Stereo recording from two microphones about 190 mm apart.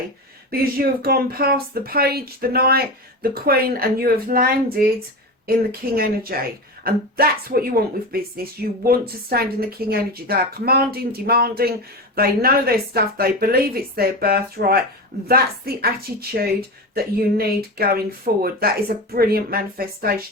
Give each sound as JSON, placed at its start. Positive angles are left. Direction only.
{"t": 0.5, "sound": "a woman's voice", "side_deg": -50}
{"t": 6.0, "sound": "a woman's voice", "side_deg": -50}